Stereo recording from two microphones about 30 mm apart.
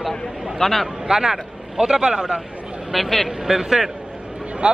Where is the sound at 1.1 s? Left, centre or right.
Centre.